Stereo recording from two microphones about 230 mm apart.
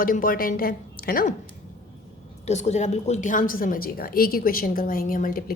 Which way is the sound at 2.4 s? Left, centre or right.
Left.